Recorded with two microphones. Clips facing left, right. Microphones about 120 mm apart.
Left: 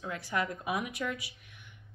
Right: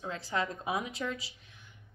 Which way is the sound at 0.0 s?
25° right (ahead or behind).